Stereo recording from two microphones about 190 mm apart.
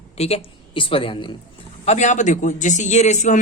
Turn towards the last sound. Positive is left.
turn(degrees=40)  # may be behind; listen again after turning